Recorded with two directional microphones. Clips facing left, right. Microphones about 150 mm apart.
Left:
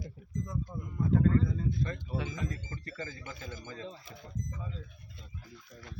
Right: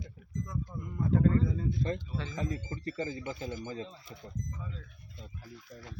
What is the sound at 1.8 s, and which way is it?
Speech, 30° right (ahead or behind).